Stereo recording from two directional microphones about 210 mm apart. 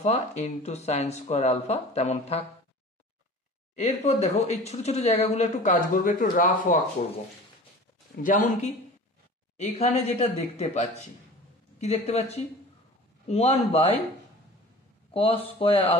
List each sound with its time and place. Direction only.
0.0 s speech: 30° left (ahead or behind)
3.7 s speech: 30° left (ahead or behind)
8.2 s speech: 35° left (ahead or behind)
15.1 s speech: 25° left (ahead or behind)